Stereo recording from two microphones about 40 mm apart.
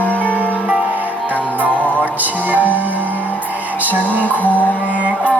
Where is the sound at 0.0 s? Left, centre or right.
Left.